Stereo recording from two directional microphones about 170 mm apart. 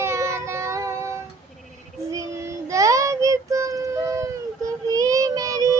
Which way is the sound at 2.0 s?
20° right (ahead or behind).